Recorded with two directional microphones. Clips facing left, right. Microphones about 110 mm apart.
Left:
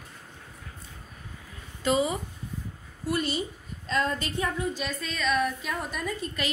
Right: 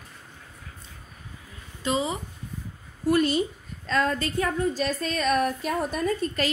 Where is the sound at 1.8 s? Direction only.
20° right (ahead or behind).